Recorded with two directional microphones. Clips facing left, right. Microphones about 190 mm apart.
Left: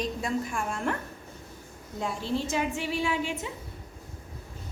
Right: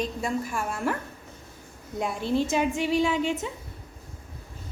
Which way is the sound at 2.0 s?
15° right (ahead or behind).